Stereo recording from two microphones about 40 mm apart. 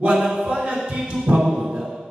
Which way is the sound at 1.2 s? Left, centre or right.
Centre.